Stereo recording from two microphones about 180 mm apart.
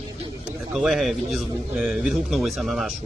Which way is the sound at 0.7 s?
Centre (ahead or behind).